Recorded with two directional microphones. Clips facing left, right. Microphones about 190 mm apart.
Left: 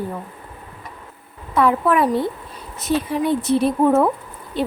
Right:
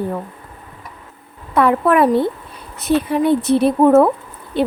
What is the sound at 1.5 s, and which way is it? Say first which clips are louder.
A woman's voice: right 3 dB; 60° right (ahead or behind).